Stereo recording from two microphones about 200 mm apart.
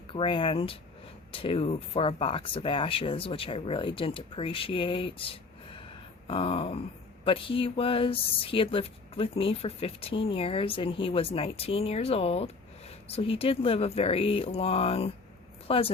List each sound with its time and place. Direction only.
0.1 s speech: 25° left (ahead or behind)